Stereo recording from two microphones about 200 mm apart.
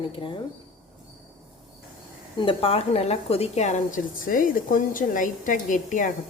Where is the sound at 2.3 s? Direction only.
25° left (ahead or behind).